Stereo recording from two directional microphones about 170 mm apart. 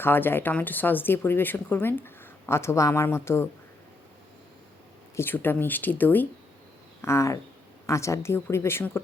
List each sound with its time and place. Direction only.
0.0 s speech: 10° left (ahead or behind)
5.1 s speech: 10° left (ahead or behind)